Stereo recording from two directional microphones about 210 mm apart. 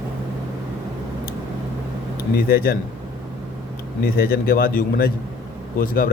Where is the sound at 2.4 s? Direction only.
45° left (ahead or behind).